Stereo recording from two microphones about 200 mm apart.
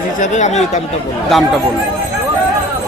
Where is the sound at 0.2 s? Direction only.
35° left (ahead or behind).